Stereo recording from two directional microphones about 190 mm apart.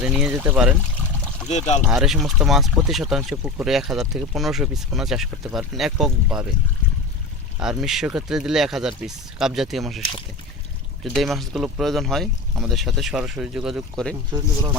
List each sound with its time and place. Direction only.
0.0 s speech: 5° right (ahead or behind)
1.5 s speech: 35° left (ahead or behind)
1.9 s speech: centre (ahead or behind)
7.6 s speech: 5° right (ahead or behind)
11.0 s speech: centre (ahead or behind)
14.3 s speech: 25° right (ahead or behind)